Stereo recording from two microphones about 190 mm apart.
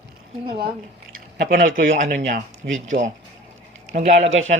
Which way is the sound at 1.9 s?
40° right (ahead or behind).